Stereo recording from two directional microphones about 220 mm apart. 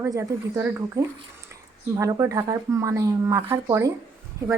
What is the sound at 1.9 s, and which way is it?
Speech, 15° right (ahead or behind).